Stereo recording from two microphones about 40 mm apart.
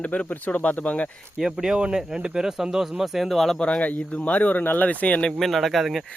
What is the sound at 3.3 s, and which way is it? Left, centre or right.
Speech, centre.